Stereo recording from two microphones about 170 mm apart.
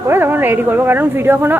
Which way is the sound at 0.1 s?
10° right (ahead or behind).